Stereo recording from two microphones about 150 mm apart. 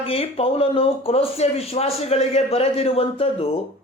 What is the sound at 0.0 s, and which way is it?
A man's voice, 40° left (ahead or behind).